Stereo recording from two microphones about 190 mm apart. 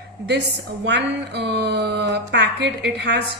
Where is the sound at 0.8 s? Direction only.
65° right (ahead or behind).